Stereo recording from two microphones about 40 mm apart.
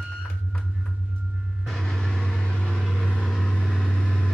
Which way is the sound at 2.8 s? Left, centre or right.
Centre.